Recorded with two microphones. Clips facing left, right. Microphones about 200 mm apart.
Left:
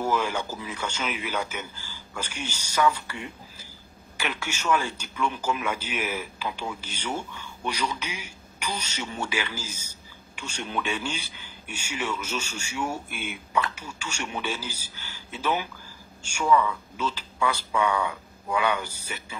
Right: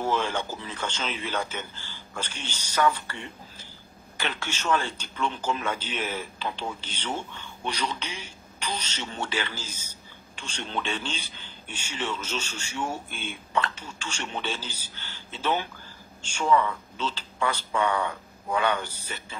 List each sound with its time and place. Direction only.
0.2 s a man's voice: 10° left (ahead or behind)
17.5 s a man's voice: 10° left (ahead or behind)